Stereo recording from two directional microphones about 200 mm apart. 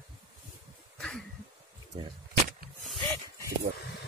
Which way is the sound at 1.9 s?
25° right (ahead or behind).